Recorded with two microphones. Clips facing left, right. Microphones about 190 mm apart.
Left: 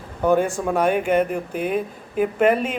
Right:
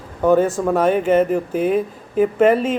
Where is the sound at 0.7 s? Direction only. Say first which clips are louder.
Right 3 dB; 10° left (ahead or behind).